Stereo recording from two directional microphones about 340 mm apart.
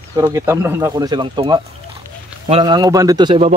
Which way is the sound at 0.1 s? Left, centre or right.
Centre.